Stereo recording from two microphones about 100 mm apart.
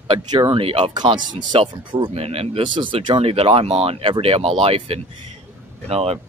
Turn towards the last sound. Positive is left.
turn(degrees=-85)